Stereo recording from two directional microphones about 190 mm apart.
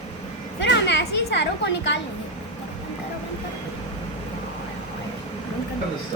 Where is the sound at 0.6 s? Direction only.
60° left (ahead or behind).